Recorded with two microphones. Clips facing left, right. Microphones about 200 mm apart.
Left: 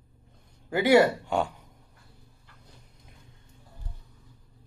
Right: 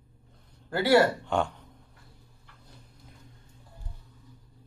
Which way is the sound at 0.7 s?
15° left (ahead or behind).